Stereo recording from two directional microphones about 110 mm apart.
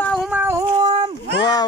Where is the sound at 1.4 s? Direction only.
35° left (ahead or behind).